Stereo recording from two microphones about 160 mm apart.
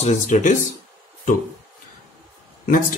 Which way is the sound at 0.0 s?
50° left (ahead or behind).